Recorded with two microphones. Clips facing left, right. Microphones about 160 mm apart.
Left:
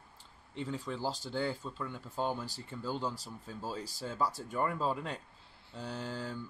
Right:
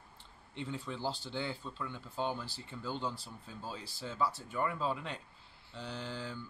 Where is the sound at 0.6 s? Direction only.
40° left (ahead or behind).